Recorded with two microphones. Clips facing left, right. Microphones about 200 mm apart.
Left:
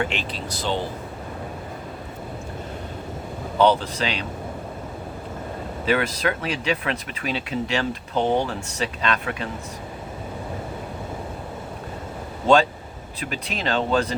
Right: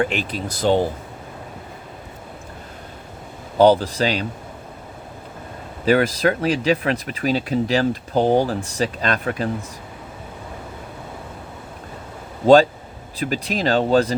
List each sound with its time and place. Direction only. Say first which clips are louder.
0.0 s speech: right 5 dB; 45° right (ahead or behind)
3.6 s speech: right 5 dB; 35° right (ahead or behind)
5.8 s speech: right 6 dB; 40° right (ahead or behind)
13.1 s speech: right 7 dB; 35° right (ahead or behind)